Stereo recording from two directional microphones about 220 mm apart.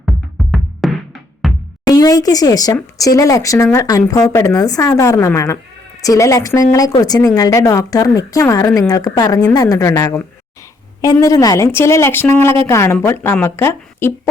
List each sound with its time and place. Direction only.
0.5 s music: centre (ahead or behind)
1.9 s speech: 15° left (ahead or behind)